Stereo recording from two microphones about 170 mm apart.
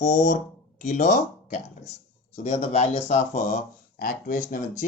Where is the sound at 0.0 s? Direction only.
45° left (ahead or behind).